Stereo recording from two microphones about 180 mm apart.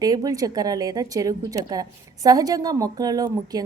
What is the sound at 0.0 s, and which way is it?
A woman's voice, 20° right (ahead or behind).